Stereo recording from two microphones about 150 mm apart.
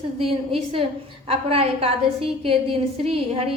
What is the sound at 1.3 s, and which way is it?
A woman's voice, 40° right (ahead or behind).